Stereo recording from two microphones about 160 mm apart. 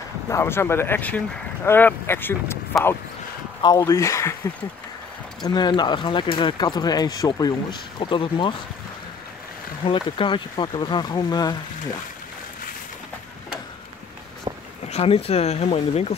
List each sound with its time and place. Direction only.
0.3 s speech: 15° left (ahead or behind)
3.6 s speech: 20° left (ahead or behind)
5.4 s speech: 25° left (ahead or behind)
9.8 s speech: 30° left (ahead or behind)
14.9 s speech: 40° left (ahead or behind)